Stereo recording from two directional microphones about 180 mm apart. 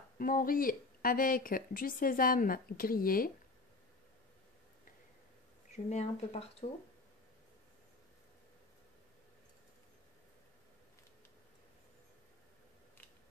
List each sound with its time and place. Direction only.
0.2 s speech: 50° left (ahead or behind)
5.9 s speech: 35° left (ahead or behind)